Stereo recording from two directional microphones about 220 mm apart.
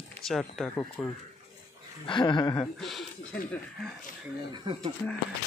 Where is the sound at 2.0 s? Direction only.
20° left (ahead or behind).